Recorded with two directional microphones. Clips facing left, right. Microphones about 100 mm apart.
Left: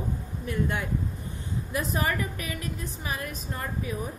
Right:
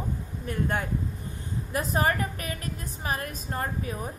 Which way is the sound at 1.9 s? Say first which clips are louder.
Right 5 dB; 40° right (ahead or behind).